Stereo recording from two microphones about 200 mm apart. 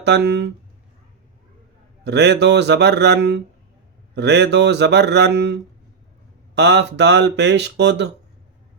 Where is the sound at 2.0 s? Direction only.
55° right (ahead or behind).